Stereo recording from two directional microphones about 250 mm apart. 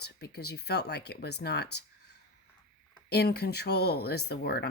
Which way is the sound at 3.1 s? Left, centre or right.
Left.